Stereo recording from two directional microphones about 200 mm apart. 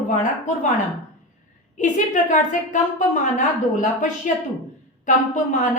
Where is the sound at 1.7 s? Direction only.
40° left (ahead or behind).